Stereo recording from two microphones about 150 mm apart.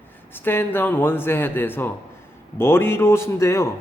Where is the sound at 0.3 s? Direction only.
15° left (ahead or behind).